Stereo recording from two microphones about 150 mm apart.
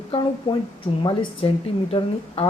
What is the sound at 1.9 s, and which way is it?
Speech, 35° left (ahead or behind).